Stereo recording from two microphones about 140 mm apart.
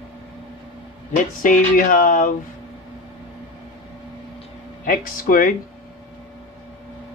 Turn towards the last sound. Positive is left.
turn(degrees=75)  # may be behind; listen again after turning